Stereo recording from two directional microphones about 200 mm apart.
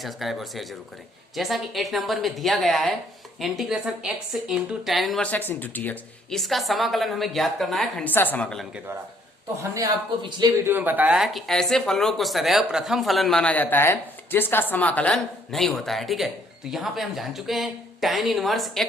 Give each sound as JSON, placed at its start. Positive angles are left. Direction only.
{"t": 0.0, "sound": "speech", "side_deg": 0}
{"t": 9.7, "sound": "speech", "side_deg": -20}
{"t": 10.7, "sound": "speech", "side_deg": -10}